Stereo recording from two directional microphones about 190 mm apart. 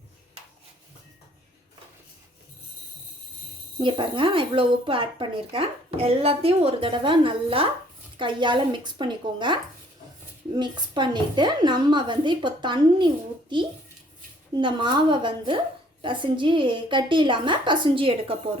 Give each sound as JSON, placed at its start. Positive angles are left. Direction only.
{"t": 3.8, "sound": "speech", "side_deg": -25}
{"t": 10.6, "sound": "speech", "side_deg": -25}
{"t": 14.5, "sound": "speech", "side_deg": -25}